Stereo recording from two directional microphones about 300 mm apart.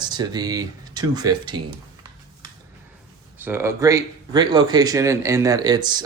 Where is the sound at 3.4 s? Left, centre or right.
Centre.